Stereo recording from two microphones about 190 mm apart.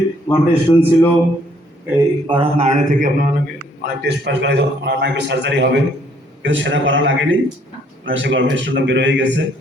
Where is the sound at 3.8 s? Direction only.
60° right (ahead or behind).